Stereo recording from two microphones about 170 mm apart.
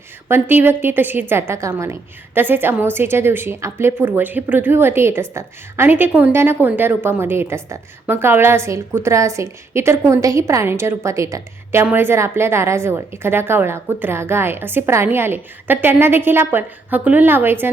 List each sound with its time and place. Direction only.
0.3 s a woman's voice: 15° right (ahead or behind)